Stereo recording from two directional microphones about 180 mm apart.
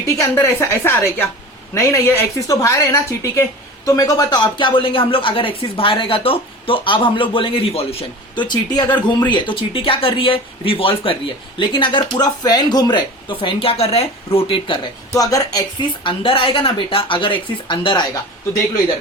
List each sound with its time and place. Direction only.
0.3 s a woman's voice: 15° left (ahead or behind)